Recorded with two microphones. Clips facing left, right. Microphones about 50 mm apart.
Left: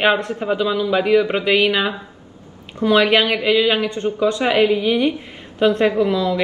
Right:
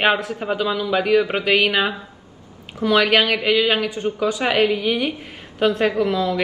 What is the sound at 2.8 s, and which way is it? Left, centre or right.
A man's voice, centre.